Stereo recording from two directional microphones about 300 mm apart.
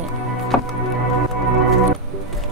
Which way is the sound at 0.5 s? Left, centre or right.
Centre.